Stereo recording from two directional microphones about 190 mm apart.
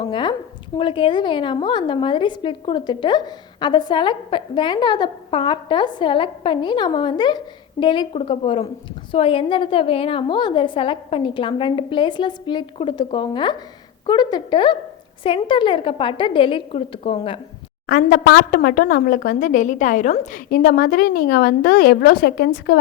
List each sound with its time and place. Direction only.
0.0 s a woman's voice: 25° left (ahead or behind)
17.8 s speech: 50° left (ahead or behind)